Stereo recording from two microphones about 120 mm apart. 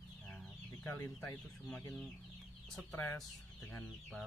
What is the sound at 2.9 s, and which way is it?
Speech, 20° left (ahead or behind).